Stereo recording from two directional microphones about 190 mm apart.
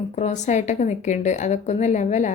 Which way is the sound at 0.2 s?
40° left (ahead or behind).